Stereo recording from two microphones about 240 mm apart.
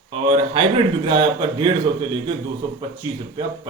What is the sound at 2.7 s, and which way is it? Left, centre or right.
Speech, centre.